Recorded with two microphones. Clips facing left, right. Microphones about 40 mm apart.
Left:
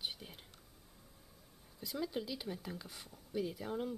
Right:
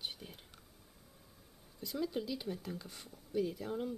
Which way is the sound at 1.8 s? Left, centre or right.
Centre.